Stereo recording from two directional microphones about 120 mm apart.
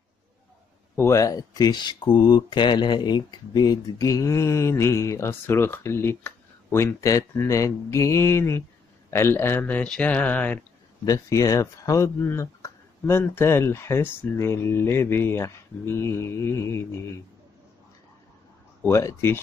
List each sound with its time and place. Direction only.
0.9 s speech: 25° left (ahead or behind)
11.1 s speech: 30° left (ahead or behind)
18.9 s speech: 20° left (ahead or behind)